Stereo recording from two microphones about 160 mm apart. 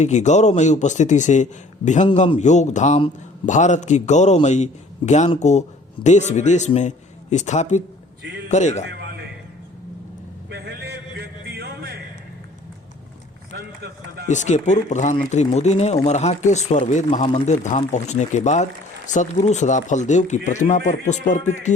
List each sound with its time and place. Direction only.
0.0 s a man's voice: 45° left (ahead or behind)
10.5 s a sound: 90° right
13.5 s run: 80° right
14.3 s speech: 50° left (ahead or behind)